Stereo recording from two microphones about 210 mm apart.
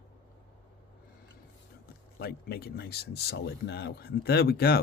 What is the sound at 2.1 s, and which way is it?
Speech, 50° left (ahead or behind).